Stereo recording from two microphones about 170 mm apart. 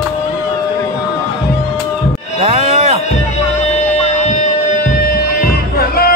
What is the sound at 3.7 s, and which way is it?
Music, 40° left (ahead or behind).